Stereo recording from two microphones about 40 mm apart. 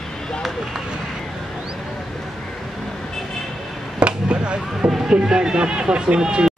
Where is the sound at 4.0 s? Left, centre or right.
Right.